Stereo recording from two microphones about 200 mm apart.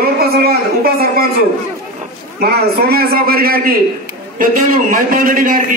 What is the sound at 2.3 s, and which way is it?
A man's voice, 50° right (ahead or behind).